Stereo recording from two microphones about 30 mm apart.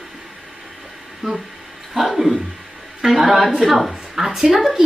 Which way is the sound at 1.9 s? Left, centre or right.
Centre.